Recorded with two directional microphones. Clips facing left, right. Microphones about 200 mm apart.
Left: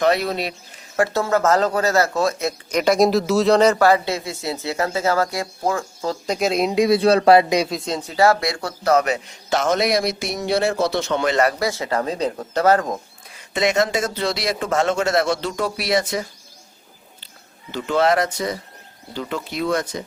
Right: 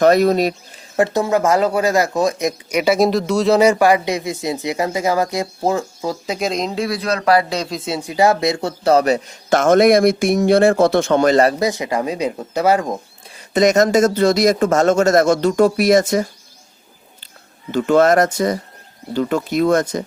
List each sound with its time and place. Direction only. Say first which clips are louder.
0.0 s a man's voice: right 7 dB; 45° right (ahead or behind)
0.9 s speech: right 3 dB; 20° right (ahead or behind)
6.0 s speech: even; 5° right (ahead or behind); by 7.4 s 25° left (ahead or behind)
7.7 s a man's voice: right 2 dB; 5° right (ahead or behind); by 9.2 s 35° right (ahead or behind)
9.5 s a man's voice: right 8 dB; 50° right (ahead or behind)
11.6 s speech: right 3 dB; 15° right (ahead or behind)
13.5 s a man's voice: right 6 dB; 40° right (ahead or behind)
17.7 s a man's voice: right 6 dB; 50° right (ahead or behind)